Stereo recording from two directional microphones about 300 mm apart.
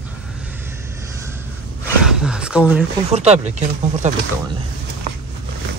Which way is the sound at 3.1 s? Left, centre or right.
Right.